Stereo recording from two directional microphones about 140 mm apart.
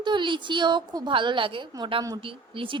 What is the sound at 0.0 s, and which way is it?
A woman's voice, 35° right (ahead or behind).